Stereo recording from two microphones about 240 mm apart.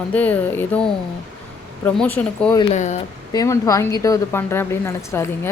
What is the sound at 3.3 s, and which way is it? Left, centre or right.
A woman's voice, centre.